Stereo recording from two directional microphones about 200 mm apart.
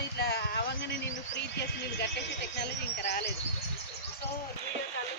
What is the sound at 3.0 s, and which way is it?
Speech, 55° left (ahead or behind).